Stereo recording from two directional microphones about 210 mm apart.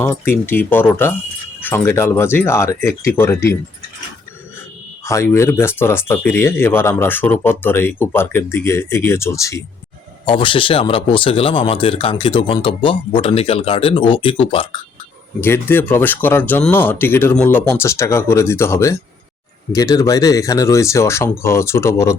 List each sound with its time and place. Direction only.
0.0 s speech: 10° left (ahead or behind)
5.0 s speech: 15° left (ahead or behind)
15.4 s speech: 10° left (ahead or behind)